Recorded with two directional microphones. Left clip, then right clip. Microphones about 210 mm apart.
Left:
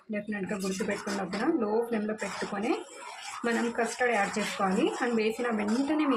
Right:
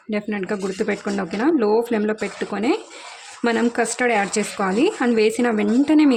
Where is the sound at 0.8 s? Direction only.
55° right (ahead or behind).